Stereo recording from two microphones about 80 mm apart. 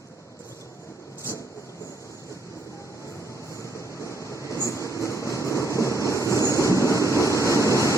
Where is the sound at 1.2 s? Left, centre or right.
Left.